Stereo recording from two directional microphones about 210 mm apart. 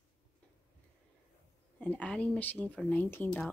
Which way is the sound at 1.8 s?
5° left (ahead or behind).